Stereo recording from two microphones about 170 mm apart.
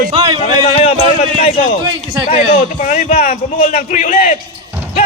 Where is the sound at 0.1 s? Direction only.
40° right (ahead or behind).